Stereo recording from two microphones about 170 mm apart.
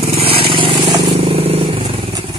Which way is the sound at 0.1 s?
35° right (ahead or behind).